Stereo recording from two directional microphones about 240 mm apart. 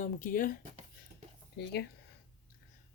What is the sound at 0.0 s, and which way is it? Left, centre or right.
Speech, left.